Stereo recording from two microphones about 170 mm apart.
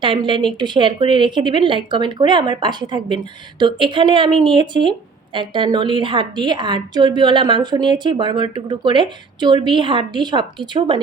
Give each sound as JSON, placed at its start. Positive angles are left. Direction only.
{"t": 0.0, "sound": "a woman's voice", "side_deg": -30}